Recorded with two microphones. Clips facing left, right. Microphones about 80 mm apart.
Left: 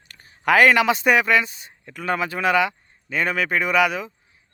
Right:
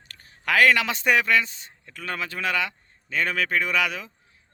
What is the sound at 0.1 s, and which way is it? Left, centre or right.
Speech, centre.